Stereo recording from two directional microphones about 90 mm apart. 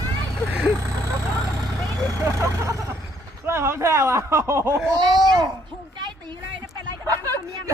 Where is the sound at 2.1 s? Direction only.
35° right (ahead or behind).